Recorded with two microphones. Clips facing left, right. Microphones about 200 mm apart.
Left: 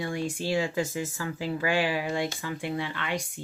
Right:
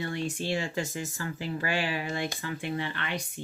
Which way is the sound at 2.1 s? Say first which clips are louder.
Left 3 dB; 15° left (ahead or behind).